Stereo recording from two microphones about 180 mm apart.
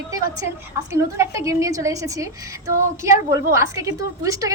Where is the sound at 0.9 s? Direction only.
15° right (ahead or behind).